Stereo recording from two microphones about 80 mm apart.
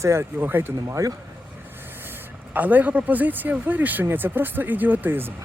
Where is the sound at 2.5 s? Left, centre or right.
Right.